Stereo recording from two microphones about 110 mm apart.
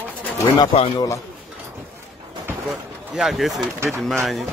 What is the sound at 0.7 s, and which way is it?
Speech, 65° left (ahead or behind).